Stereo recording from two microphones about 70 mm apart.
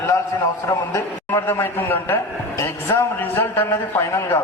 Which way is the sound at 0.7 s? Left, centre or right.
Left.